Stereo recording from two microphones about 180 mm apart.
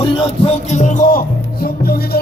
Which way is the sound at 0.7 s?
45° left (ahead or behind).